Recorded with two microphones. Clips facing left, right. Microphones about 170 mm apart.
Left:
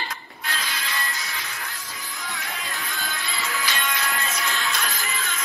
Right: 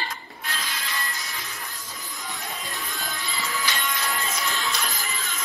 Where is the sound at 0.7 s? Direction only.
80° left.